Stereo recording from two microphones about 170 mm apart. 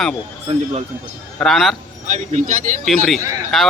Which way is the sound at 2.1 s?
45° right (ahead or behind).